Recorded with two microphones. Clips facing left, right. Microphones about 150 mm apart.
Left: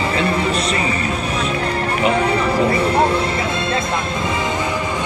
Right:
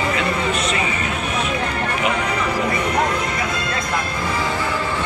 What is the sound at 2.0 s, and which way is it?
Music, 30° left (ahead or behind).